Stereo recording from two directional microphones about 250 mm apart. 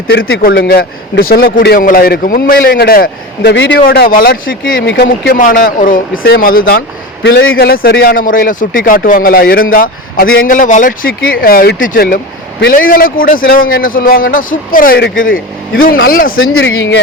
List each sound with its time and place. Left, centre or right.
0.1 s a man's voice: left
15.3 s speech: left
16.6 s speech: left